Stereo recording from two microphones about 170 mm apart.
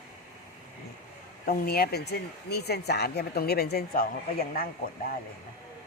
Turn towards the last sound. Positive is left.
turn(degrees=55)  # may be behind; listen again after turning